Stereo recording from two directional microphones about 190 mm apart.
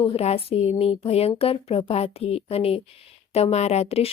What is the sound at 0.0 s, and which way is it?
Speech, 35° left (ahead or behind).